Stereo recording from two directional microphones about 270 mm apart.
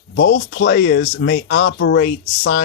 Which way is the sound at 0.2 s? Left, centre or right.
Left.